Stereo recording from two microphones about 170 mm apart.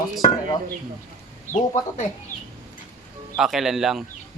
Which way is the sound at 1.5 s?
45° left (ahead or behind).